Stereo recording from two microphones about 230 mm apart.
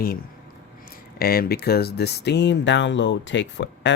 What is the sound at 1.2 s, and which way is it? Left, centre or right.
Speech, left.